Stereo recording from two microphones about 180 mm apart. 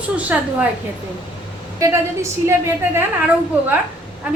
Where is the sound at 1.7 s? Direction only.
15° right (ahead or behind).